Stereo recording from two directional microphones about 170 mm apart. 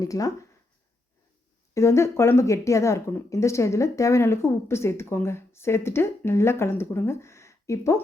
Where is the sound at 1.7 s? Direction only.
15° left (ahead or behind).